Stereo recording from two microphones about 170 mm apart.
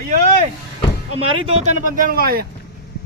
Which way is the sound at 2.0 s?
55° right (ahead or behind).